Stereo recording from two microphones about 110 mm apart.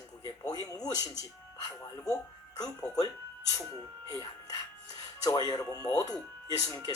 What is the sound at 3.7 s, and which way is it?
Speech, 35° left (ahead or behind).